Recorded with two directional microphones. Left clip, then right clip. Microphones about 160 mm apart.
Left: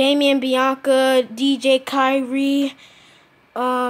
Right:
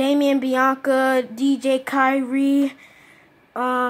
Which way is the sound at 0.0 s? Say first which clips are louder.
Left 3 dB; 20° left (ahead or behind).